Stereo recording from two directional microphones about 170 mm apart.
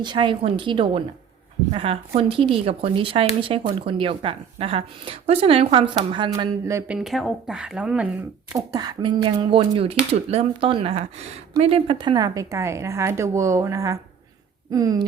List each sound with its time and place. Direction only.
0.0 s speech: 25° right (ahead or behind)
6.9 s speech: centre (ahead or behind)
8.5 s speech: 20° right (ahead or behind)